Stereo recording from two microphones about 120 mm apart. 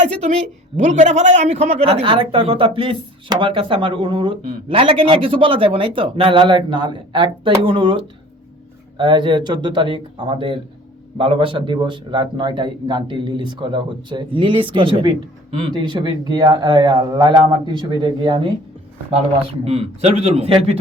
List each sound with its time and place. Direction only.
0.8 s a man's voice: 85° right; by 18.4 s 45° right (ahead or behind)
19.6 s a man's voice: 60° right (ahead or behind)
20.3 s a man's voice: 50° right (ahead or behind)